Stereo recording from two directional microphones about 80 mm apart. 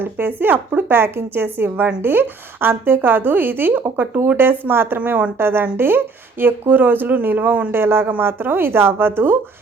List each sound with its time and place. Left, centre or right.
0.0 s a woman's voice: right